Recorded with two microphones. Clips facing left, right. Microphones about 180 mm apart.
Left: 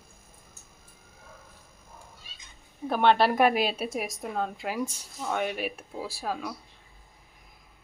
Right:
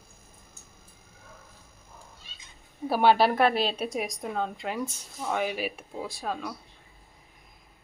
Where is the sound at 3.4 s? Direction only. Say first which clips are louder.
Left 1 dB; 10° left (ahead or behind).